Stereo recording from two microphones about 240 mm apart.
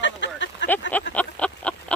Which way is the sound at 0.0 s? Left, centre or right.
Left.